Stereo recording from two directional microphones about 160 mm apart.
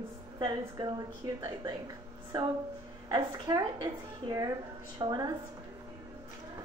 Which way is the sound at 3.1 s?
25° right (ahead or behind).